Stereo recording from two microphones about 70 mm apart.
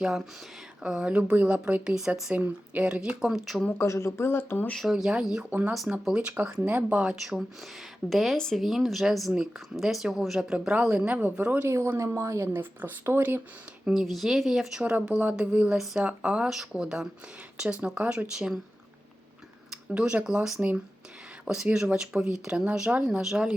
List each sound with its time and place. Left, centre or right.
0.8 s a woman's voice: centre
3.2 s speech: centre
3.8 s speech: left
4.9 s a woman's voice: centre
5.5 s speech: right
5.7 s speech: centre
6.1 s a woman's voice: centre
7.1 s a woman's voice: centre; by 11.7 s right
11.7 s speech: right
12.5 s speech: right
13.8 s a woman's voice: centre
20.0 s a woman's voice: centre